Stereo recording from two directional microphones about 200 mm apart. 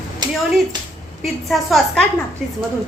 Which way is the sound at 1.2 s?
Centre (ahead or behind).